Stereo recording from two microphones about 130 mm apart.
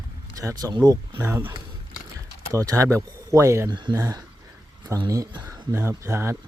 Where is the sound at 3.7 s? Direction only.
35° right (ahead or behind).